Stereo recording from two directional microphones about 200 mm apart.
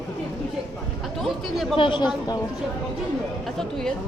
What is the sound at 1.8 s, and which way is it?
Speech, 25° left (ahead or behind).